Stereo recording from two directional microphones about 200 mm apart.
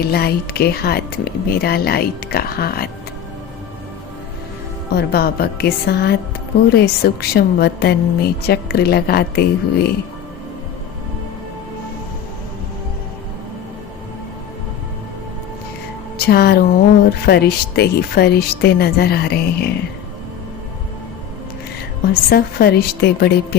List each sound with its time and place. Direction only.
0.0 s speech: 50° left (ahead or behind)
4.9 s speech: 50° left (ahead or behind)
16.1 s speech: 50° left (ahead or behind)
22.0 s speech: 50° left (ahead or behind)